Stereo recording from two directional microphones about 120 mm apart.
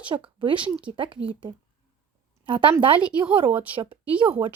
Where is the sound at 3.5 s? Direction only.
15° right (ahead or behind).